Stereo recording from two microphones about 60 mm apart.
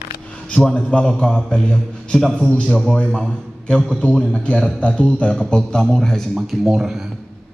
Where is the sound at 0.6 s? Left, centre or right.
Centre.